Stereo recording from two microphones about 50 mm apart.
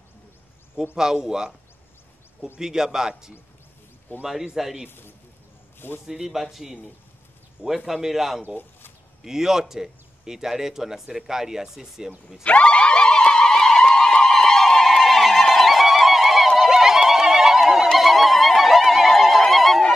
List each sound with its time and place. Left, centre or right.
0.9 s speech: centre
2.6 s a man's voice: centre
4.8 s a man's voice: left
6.0 s speech: centre
12.4 s a sound: left; by 16.7 s centre
16.7 s neigh: centre
17.9 s a sound: centre